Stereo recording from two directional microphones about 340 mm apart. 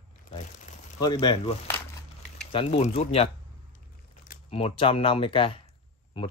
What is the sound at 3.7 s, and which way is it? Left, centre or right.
Crumpling, left.